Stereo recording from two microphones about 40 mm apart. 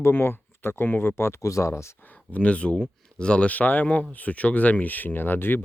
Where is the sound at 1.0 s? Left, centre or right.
Left.